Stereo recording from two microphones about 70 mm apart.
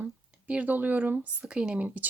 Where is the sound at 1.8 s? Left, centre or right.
Right.